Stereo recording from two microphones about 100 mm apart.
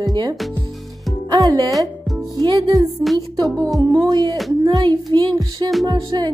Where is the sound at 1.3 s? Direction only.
40° right (ahead or behind).